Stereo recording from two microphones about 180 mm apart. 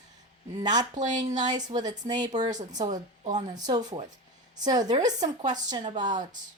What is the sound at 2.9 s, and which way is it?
Speech, 40° right (ahead or behind).